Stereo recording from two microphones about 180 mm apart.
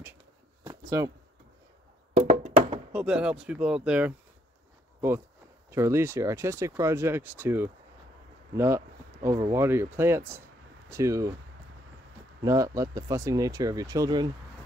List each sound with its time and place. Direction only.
0.7 s a sound: 20° right (ahead or behind)
2.1 s music: 40° right (ahead or behind)
2.9 s speech: 5° right (ahead or behind)
5.7 s speech: 15° right (ahead or behind)
12.4 s speech: 20° right (ahead or behind)